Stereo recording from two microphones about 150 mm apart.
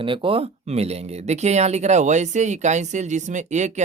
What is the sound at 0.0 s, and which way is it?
Speech, 35° right (ahead or behind).